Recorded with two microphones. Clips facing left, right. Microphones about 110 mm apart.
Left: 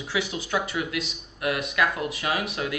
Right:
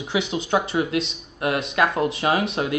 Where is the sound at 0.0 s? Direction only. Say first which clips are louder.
Right 4 dB; 20° right (ahead or behind).